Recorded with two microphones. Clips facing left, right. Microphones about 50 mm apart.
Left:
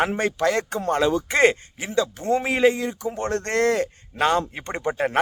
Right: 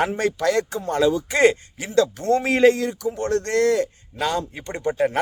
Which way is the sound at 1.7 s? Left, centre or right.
Centre.